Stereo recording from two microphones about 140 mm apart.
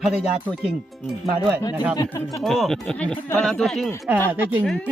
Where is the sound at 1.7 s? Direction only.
10° right (ahead or behind).